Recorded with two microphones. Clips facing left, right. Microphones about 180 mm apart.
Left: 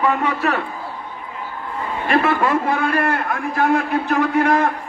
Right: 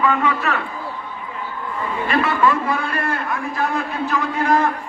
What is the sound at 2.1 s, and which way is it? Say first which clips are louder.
A man's voice: left 1 dB; 55° left (ahead or behind).